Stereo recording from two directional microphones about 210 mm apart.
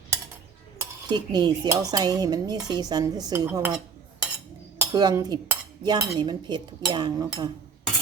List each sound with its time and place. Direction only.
0.8 s cutlery: 20° right (ahead or behind)
1.9 s dishes: 20° right (ahead or behind)
4.8 s cutlery: 20° right (ahead or behind)